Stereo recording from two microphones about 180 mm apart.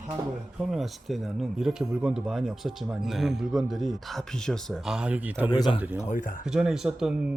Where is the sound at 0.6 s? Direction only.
Centre (ahead or behind).